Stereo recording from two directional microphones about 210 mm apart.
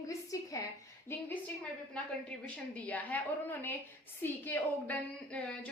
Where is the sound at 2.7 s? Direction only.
5° left (ahead or behind).